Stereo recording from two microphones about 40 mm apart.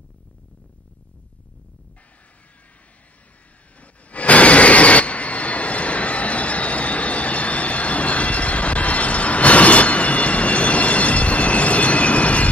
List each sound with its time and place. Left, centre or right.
3.8 s train: left